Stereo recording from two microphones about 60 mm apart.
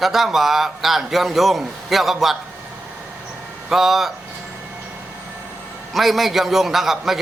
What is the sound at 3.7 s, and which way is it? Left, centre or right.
Speech, centre.